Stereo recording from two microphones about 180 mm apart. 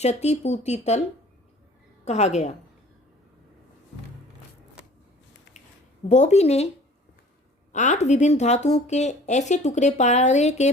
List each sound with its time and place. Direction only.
0.0 s speech: 35° left (ahead or behind)
2.0 s speech: 40° left (ahead or behind)
6.1 s speech: 40° left (ahead or behind)
7.7 s speech: 40° left (ahead or behind)